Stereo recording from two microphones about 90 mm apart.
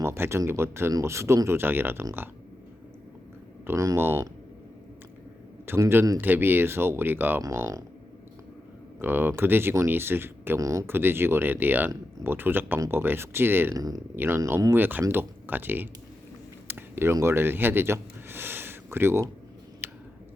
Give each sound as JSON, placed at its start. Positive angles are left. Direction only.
{"t": 0.0, "sound": "speech", "side_deg": -30}
{"t": 3.8, "sound": "speech", "side_deg": -35}
{"t": 5.6, "sound": "speech", "side_deg": -30}
{"t": 7.4, "sound": "speech", "side_deg": -35}
{"t": 9.0, "sound": "speech", "side_deg": -25}
{"t": 10.6, "sound": "speech", "side_deg": -35}
{"t": 10.8, "sound": "speech", "side_deg": -25}
{"t": 13.7, "sound": "speech", "side_deg": -45}
{"t": 14.2, "sound": "speech", "side_deg": -30}
{"t": 16.6, "sound": "a sound", "side_deg": -25}